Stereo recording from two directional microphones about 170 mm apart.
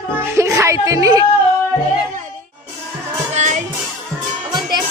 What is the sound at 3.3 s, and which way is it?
Music, 45° right (ahead or behind).